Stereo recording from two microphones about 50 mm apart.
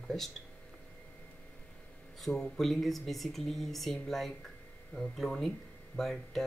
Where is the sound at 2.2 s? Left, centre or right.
Centre.